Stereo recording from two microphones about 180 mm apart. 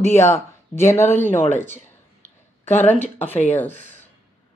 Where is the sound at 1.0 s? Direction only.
45° left (ahead or behind).